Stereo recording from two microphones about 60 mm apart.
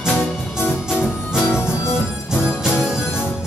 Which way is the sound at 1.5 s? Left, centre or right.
Left.